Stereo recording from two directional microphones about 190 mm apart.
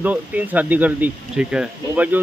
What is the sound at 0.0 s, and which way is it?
Speech, 10° right (ahead or behind).